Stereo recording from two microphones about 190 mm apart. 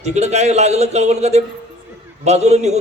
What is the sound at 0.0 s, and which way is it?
A man's voice, 35° right (ahead or behind).